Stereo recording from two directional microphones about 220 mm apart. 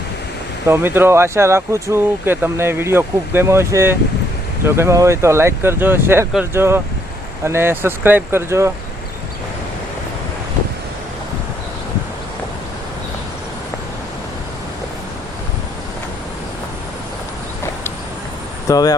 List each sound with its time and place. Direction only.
0.7 s speech: 10° right (ahead or behind)
18.7 s speech: 15° left (ahead or behind)